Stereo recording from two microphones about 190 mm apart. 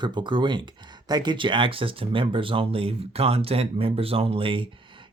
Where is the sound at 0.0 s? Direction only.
25° right (ahead or behind).